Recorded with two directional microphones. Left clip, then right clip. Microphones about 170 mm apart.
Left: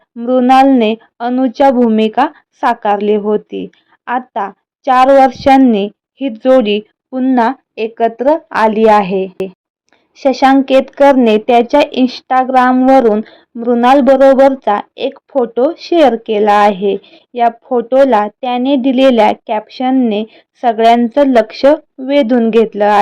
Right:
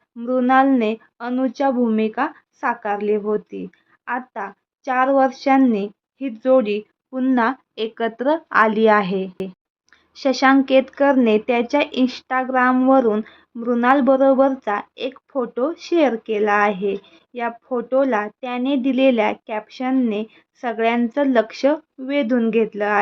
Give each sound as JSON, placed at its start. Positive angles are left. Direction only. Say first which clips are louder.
{"t": 0.2, "sound": "speech", "louder": "left 8 dB", "side_deg": 35}
{"t": 7.3, "sound": "a woman's voice", "louder": "left 8 dB", "side_deg": 20}